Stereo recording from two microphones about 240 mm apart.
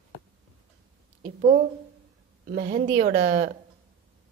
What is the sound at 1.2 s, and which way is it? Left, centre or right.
A woman's voice, right.